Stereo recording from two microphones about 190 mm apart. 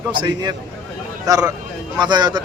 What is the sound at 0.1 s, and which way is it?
A man's voice, 25° right (ahead or behind).